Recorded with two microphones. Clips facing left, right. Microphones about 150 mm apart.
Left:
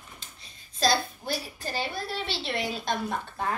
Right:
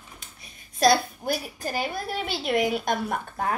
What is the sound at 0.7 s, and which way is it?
Speech, 60° right (ahead or behind).